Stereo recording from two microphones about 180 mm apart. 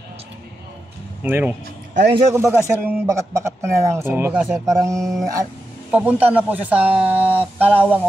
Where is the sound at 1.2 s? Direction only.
10° right (ahead or behind).